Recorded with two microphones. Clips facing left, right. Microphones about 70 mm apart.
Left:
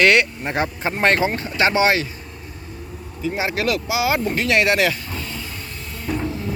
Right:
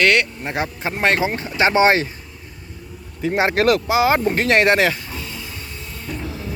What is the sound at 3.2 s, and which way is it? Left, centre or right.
Speech, right.